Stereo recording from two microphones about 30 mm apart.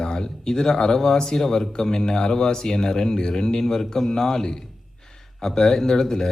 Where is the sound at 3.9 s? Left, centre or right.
Centre.